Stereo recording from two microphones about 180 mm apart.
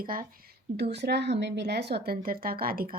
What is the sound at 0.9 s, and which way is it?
Speech, 70° right (ahead or behind).